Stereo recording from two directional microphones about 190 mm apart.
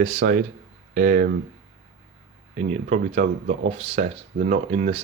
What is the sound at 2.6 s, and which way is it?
Speech, 40° right (ahead or behind).